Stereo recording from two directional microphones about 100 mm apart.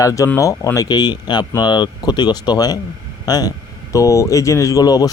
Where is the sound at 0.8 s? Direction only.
45° left (ahead or behind).